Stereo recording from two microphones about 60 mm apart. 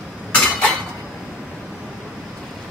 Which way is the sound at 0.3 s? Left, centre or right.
Centre.